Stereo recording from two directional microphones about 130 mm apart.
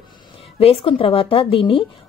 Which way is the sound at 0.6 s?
45° left (ahead or behind).